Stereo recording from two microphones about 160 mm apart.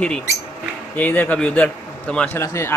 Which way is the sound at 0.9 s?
10° left (ahead or behind).